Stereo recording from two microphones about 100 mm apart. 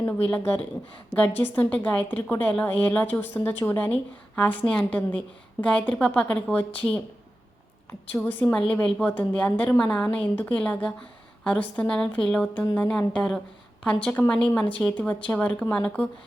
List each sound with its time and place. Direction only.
0.3 s a woman's voice: 15° left (ahead or behind)
4.4 s a woman's voice: 10° left (ahead or behind)
8.3 s a woman's voice: 15° left (ahead or behind)